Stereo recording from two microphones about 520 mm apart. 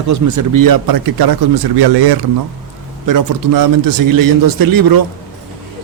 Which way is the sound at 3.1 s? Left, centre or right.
Right.